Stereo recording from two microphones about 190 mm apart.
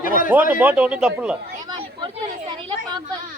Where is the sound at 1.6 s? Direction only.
25° right (ahead or behind).